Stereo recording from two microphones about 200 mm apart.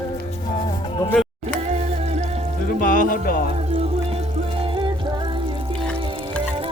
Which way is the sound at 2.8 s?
45° left (ahead or behind).